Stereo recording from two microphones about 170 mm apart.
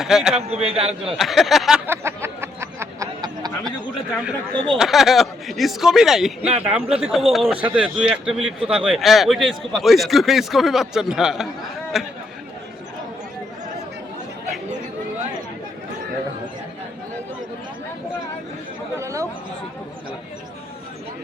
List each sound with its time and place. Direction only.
0.0 s speech: 5° right (ahead or behind)
0.5 s a man's voice: 35° right (ahead or behind)
1.1 s speech: centre (ahead or behind)
1.9 s a sound: 15° right (ahead or behind)
4.5 s speech: 30° right (ahead or behind)
4.8 s speech: centre (ahead or behind)
8.6 s a man's voice: 30° right (ahead or behind)
8.9 s speech: centre (ahead or behind)
18.9 s chatter: 20° right (ahead or behind)